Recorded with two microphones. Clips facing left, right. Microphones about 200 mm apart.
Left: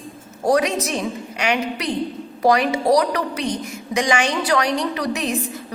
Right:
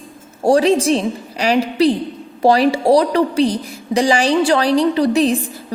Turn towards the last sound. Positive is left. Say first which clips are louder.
# right 8 dB
turn(degrees=-30)  # may be behind; listen again after turning